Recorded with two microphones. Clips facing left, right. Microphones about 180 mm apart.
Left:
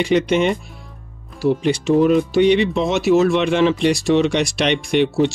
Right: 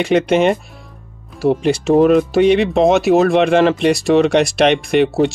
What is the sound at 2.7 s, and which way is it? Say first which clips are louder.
Speech: right 4 dB; 60° right (ahead or behind).